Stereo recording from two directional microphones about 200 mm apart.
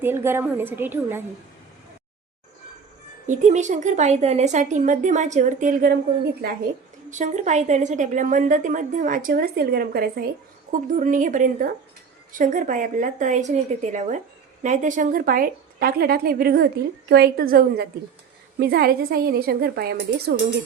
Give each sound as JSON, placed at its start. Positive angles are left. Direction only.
{"t": 0.0, "sound": "a woman's voice", "side_deg": -10}
{"t": 3.2, "sound": "a woman's voice", "side_deg": -35}
{"t": 7.1, "sound": "a woman's voice", "side_deg": -35}